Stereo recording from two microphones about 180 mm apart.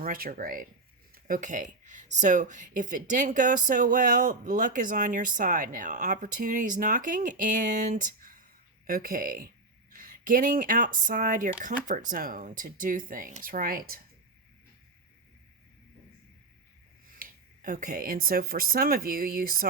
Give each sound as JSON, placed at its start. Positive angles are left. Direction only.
{"t": 0.0, "sound": "speech", "side_deg": -50}
{"t": 17.2, "sound": "speech", "side_deg": -50}